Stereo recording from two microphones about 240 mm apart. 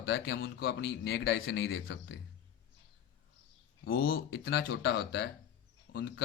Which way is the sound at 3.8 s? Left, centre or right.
Left.